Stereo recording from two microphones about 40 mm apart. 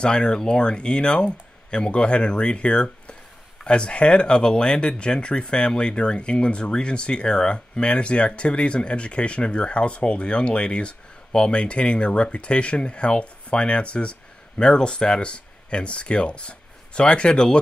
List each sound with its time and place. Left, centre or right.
0.0 s speech: left